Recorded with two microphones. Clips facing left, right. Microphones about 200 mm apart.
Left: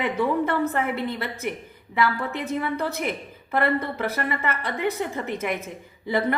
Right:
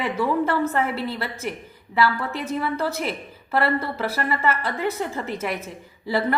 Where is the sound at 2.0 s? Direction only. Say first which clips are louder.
Right 1 dB; 15° left (ahead or behind).